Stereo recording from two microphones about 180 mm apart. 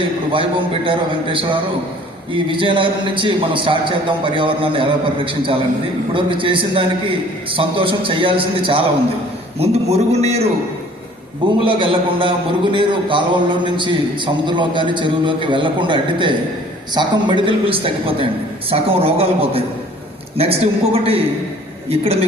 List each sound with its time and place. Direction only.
0.3 s a man's voice: 30° right (ahead or behind)
11.6 s a man's voice: 30° right (ahead or behind)